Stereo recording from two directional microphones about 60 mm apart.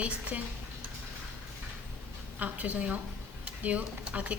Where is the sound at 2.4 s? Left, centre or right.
Right.